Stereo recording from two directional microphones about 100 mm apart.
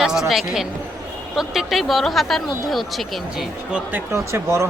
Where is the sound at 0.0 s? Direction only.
5° right (ahead or behind).